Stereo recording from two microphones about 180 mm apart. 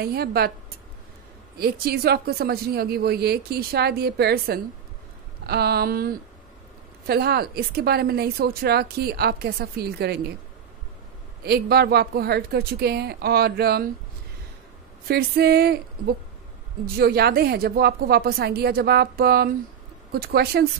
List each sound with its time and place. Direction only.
0.0 s a woman's voice: 60° right (ahead or behind)
1.6 s a woman's voice: 60° right (ahead or behind)
11.4 s a woman's voice: 60° right (ahead or behind)
15.0 s a woman's voice: 60° right (ahead or behind)